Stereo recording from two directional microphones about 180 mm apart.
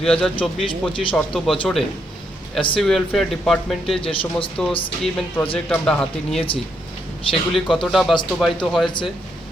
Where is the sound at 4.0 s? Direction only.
30° left (ahead or behind).